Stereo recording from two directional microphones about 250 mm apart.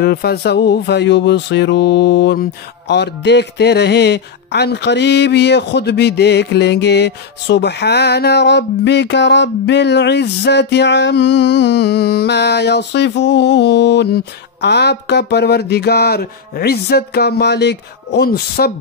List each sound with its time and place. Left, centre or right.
0.0 s speech: left